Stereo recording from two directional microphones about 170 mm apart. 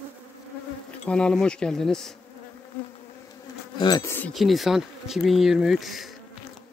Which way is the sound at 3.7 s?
25° left (ahead or behind).